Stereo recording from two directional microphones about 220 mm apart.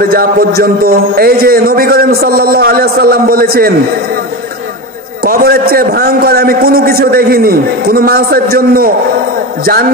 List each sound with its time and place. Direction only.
0.0 s a man's voice: 45° right (ahead or behind)
5.2 s a man's voice: 45° right (ahead or behind)